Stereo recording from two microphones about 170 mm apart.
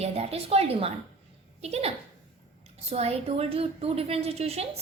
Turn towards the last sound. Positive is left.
turn(degrees=-35)  # may be behind; listen again after turning